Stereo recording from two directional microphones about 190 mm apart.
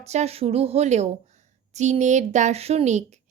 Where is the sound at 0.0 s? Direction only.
35° right (ahead or behind).